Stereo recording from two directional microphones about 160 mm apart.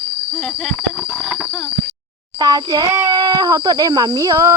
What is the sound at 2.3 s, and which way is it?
Speech, 25° right (ahead or behind).